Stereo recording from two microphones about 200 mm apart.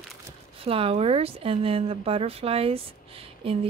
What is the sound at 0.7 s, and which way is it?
Speech, 30° right (ahead or behind).